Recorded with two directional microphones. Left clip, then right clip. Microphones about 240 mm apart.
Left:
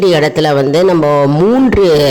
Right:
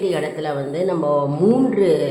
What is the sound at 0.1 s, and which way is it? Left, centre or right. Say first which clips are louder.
Speech: left 12 dB; left.